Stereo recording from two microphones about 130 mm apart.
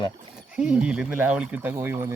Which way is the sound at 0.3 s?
5° right (ahead or behind).